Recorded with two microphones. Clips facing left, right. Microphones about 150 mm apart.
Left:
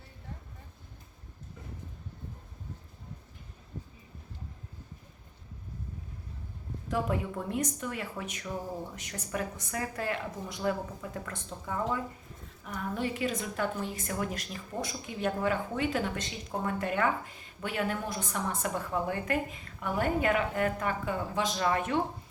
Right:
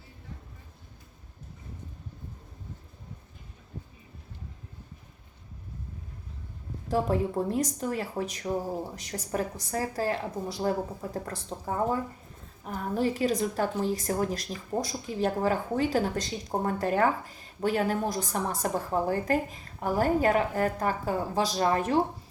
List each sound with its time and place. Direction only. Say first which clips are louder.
6.8 s a woman's voice: right 5 dB; 35° right (ahead or behind)